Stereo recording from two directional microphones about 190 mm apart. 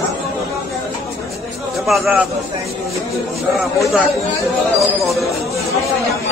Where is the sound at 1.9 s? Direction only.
Centre (ahead or behind).